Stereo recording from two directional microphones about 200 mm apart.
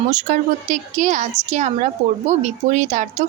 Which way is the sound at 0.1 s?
40° right (ahead or behind).